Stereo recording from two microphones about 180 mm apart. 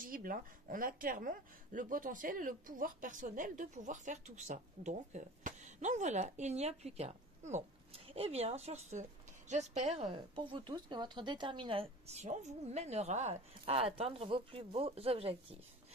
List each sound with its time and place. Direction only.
0.0 s speech: 50° right (ahead or behind); by 15.3 s 35° right (ahead or behind)